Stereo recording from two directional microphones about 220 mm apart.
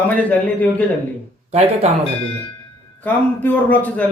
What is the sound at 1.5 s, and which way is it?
Speech, 30° right (ahead or behind).